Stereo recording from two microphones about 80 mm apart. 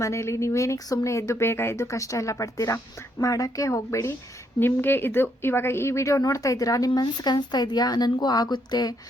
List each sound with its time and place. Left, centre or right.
0.0 s speech: left
4.6 s a woman's voice: left